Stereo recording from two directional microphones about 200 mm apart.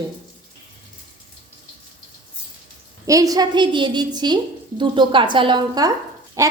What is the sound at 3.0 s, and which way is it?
A woman's voice, 15° right (ahead or behind).